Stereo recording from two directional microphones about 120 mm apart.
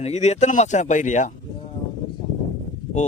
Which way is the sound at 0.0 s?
70° left (ahead or behind).